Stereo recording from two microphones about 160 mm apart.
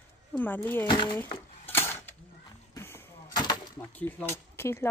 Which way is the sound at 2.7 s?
15° left (ahead or behind).